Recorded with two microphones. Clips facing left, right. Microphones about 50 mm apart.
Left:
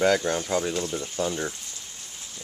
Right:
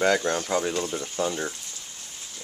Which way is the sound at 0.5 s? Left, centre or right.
Centre.